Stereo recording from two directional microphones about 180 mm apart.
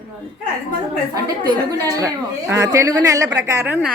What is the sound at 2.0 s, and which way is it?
A man's voice, 15° right (ahead or behind).